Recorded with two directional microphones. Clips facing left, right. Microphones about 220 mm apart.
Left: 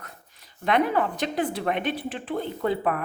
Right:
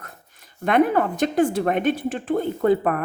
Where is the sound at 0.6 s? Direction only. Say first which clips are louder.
Right 4 dB; 50° right (ahead or behind).